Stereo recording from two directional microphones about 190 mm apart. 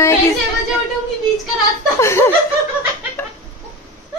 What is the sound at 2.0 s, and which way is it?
Speech, 15° left (ahead or behind).